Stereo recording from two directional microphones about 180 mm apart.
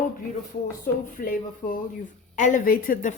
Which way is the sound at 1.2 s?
50° left (ahead or behind).